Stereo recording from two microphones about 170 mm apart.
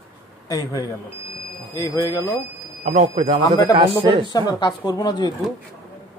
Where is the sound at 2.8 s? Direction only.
45° right (ahead or behind).